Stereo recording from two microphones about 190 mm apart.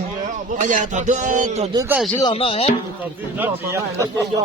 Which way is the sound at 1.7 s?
15° right (ahead or behind).